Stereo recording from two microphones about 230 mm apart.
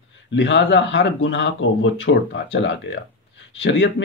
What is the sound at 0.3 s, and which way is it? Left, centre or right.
Speech, left.